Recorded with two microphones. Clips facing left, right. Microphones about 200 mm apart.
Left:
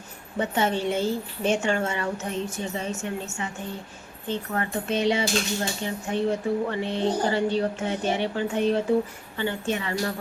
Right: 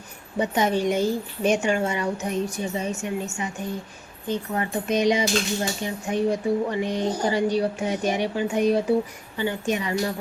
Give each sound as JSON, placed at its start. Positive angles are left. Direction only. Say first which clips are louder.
{"t": 0.3, "sound": "speech", "louder": "right 2 dB", "side_deg": -15}